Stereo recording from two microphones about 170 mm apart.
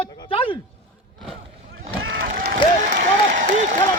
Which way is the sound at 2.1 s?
80° right.